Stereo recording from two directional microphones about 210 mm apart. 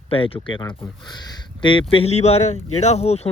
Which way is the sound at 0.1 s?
25° left (ahead or behind).